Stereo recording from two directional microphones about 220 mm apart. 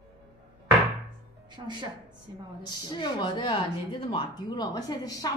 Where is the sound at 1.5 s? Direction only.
20° right (ahead or behind).